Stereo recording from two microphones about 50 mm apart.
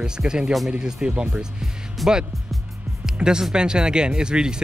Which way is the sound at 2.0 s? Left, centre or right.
Centre.